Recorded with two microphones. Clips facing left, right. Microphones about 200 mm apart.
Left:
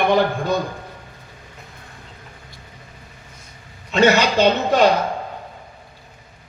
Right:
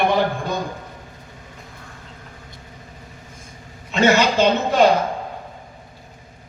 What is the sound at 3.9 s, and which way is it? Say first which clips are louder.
Speech: left 1 dB; 50° right (ahead or behind).